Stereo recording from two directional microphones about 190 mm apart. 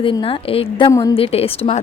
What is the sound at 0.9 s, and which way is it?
Speech, 15° left (ahead or behind).